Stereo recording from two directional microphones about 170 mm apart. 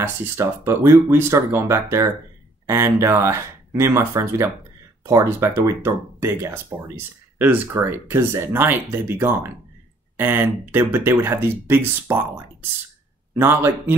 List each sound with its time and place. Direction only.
0.0 s speech: 15° right (ahead or behind)
13.3 s speech: 15° right (ahead or behind)